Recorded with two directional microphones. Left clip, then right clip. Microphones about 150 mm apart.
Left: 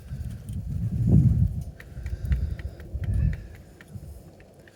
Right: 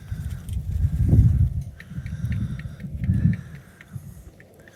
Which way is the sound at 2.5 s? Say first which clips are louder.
Right 4 dB; 40° left (ahead or behind).